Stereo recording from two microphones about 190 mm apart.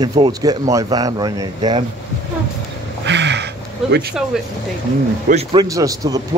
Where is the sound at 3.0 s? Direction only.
65° right (ahead or behind).